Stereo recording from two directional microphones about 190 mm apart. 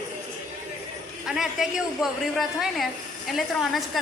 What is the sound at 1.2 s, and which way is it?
A woman's voice, centre (ahead or behind).